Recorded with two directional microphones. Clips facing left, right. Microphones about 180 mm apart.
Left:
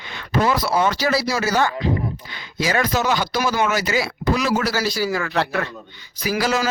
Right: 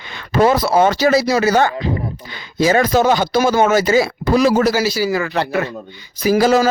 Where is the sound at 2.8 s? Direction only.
50° right (ahead or behind).